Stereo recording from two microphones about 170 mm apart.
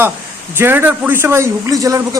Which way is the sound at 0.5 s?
15° right (ahead or behind).